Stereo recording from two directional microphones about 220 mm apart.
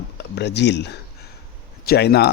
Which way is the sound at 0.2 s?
50° left (ahead or behind).